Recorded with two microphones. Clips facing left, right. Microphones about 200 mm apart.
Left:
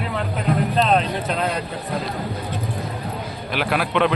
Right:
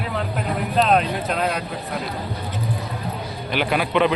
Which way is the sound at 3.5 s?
Centre (ahead or behind).